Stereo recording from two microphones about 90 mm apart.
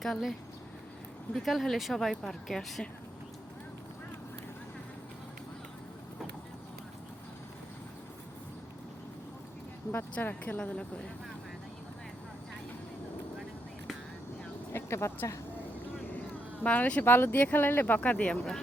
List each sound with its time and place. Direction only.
0.0 s speech: centre (ahead or behind)
9.9 s speech: 25° left (ahead or behind)
14.7 s speech: 30° left (ahead or behind)
16.6 s speech: 15° left (ahead or behind)